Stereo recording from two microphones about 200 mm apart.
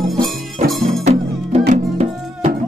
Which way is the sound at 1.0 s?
35° right (ahead or behind).